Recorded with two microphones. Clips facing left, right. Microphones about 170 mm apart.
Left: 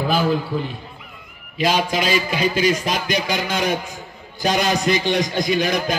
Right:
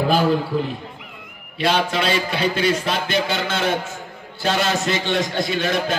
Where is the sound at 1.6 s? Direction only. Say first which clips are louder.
Even; 10° left (ahead or behind).